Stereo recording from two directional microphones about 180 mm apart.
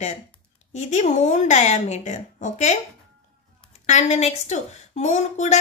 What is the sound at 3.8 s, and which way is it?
A woman's voice, 40° left (ahead or behind).